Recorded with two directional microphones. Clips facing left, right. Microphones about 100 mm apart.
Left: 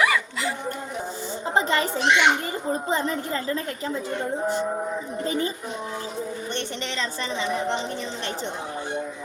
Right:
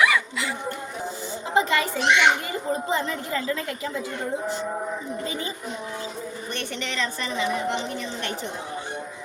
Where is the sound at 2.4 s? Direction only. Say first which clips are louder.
Even; 40° left (ahead or behind).